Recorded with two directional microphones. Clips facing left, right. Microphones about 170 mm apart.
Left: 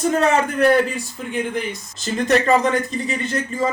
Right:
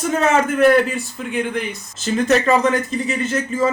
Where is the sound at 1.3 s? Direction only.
Centre (ahead or behind).